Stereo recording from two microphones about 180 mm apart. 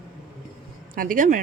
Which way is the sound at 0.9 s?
50° right (ahead or behind).